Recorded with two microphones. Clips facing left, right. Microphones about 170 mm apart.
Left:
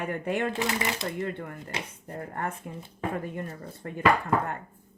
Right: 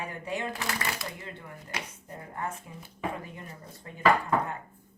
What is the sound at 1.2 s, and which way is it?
Speech, 60° left (ahead or behind).